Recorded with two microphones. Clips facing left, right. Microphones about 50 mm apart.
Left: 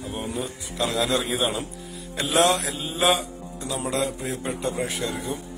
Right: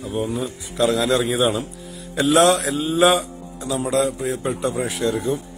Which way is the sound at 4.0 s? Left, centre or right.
Right.